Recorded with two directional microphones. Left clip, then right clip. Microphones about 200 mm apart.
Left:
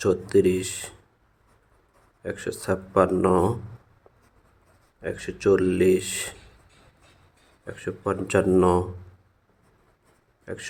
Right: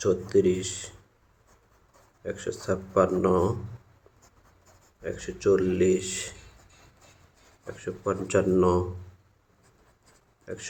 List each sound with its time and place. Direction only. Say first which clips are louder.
0.0 s speech: left 2 dB; 30° left (ahead or behind)
2.2 s speech: left 2 dB; 30° left (ahead or behind)
5.0 s speech: left 3 dB; 30° left (ahead or behind)
7.7 s speech: left 2 dB; 30° left (ahead or behind)
10.4 s speech: left 3 dB; 30° left (ahead or behind)